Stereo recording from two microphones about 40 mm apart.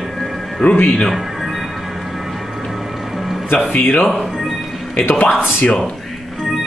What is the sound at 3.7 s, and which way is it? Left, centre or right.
Speech, left.